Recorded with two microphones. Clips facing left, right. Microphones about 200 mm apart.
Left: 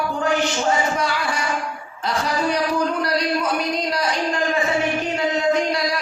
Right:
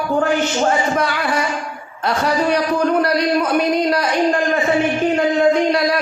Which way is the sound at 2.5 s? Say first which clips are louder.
Right 5 dB; 60° right (ahead or behind).